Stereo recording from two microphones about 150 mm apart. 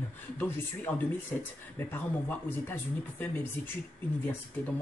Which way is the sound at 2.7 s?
15° left (ahead or behind).